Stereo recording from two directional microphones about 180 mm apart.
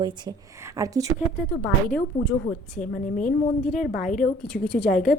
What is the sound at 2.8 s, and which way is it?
A woman's voice, 45° left (ahead or behind).